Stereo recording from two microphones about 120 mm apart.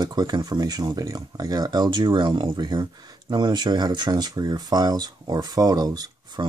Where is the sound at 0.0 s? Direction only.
35° right (ahead or behind).